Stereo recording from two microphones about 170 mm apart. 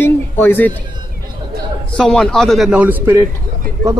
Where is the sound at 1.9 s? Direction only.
5° left (ahead or behind).